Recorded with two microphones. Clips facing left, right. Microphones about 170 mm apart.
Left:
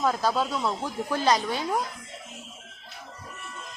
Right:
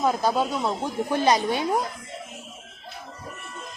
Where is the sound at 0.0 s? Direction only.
20° right (ahead or behind).